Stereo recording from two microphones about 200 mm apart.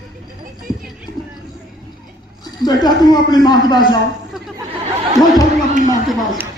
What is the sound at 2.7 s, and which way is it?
Speech, 20° left (ahead or behind).